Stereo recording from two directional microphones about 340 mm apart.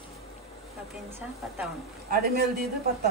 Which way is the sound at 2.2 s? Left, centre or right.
Right.